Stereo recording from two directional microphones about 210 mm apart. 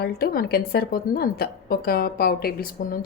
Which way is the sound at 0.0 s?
50° left (ahead or behind).